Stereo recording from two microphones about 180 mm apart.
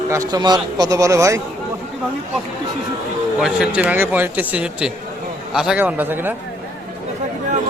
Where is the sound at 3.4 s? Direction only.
5° right (ahead or behind).